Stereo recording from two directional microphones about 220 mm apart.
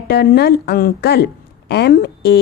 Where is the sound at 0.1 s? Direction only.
45° left (ahead or behind).